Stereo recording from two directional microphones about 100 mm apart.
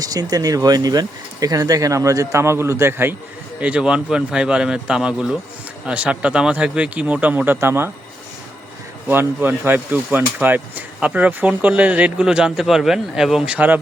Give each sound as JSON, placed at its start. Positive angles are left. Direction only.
{"t": 0.0, "sound": "speech", "side_deg": -40}
{"t": 3.6, "sound": "speech", "side_deg": -10}
{"t": 9.0, "sound": "speech", "side_deg": -20}